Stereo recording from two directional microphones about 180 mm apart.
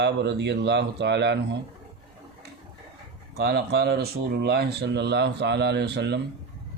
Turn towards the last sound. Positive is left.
turn(degrees=-65)  # may be behind; listen again after turning